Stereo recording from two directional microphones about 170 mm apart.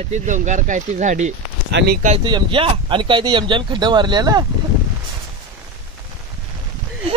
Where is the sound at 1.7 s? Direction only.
75° right (ahead or behind).